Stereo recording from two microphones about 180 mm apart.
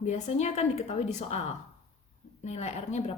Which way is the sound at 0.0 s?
40° left (ahead or behind).